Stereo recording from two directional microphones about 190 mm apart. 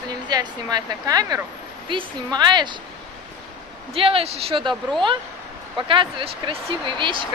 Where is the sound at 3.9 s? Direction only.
30° right (ahead or behind).